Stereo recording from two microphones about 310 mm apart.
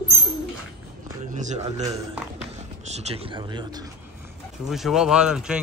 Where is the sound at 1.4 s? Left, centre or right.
Right.